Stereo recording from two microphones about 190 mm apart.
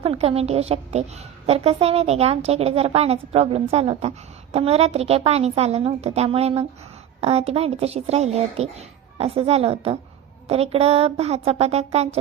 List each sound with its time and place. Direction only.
0.0 s a woman's voice: 30° right (ahead or behind)